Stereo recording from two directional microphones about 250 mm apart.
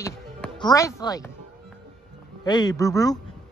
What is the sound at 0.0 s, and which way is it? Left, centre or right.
Speech, centre.